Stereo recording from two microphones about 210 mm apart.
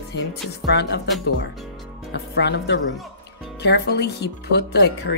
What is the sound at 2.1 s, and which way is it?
Speech, 55° left (ahead or behind).